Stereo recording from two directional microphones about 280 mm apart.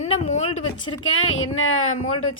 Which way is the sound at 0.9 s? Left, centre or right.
Left.